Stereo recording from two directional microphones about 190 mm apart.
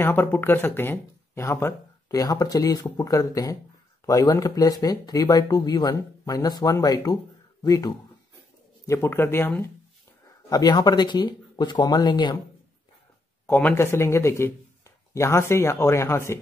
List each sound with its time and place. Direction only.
0.0 s speech: 10° left (ahead or behind)
13.5 s speech: 10° left (ahead or behind)